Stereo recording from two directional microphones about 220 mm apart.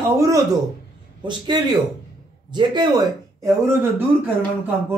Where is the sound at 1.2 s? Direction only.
20° right (ahead or behind).